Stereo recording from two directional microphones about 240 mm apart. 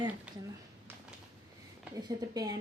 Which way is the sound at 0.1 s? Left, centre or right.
Centre.